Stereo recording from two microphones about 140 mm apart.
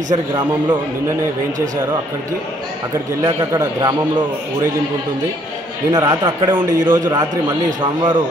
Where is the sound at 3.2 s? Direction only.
25° right (ahead or behind).